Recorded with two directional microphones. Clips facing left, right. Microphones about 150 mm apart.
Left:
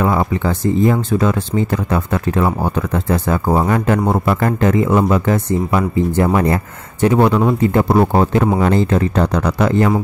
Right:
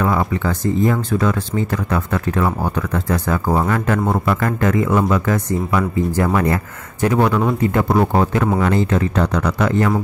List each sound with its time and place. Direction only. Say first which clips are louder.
0.0 s speech: left 2 dB; 25° left (ahead or behind)